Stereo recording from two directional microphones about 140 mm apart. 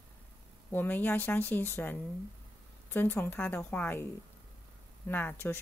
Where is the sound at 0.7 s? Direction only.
15° left (ahead or behind).